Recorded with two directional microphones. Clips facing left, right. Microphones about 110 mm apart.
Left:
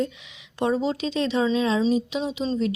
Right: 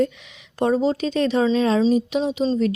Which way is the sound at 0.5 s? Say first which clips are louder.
Right 4 dB; 45° right (ahead or behind).